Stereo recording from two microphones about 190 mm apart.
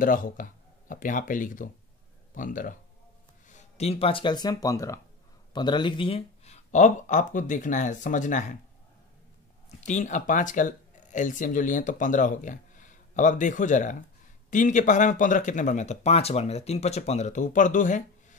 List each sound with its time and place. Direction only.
0.0 s speech: 45° left (ahead or behind)
9.7 s speech: 40° left (ahead or behind)